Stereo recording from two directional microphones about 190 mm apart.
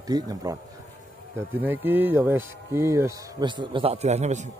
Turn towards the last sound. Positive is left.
turn(degrees=-35)  # may be behind; listen again after turning